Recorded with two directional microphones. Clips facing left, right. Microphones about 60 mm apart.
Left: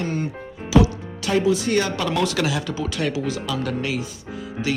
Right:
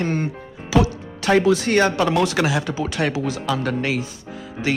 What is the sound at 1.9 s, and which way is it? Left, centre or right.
A man's voice, right.